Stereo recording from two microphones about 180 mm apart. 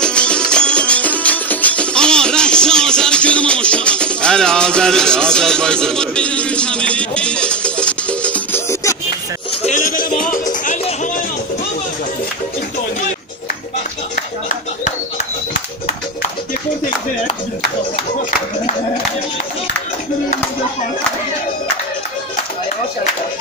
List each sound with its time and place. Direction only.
0.0 s music: 5° left (ahead or behind)
9.6 s music: 45° left (ahead or behind)